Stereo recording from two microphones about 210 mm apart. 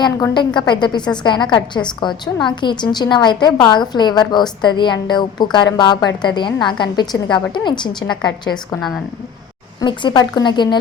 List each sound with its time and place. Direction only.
0.0 s a woman's voice: 20° left (ahead or behind)
9.8 s a woman's voice: 20° left (ahead or behind)